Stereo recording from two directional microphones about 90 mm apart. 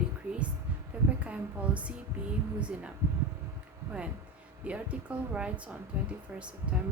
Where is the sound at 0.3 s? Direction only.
25° right (ahead or behind).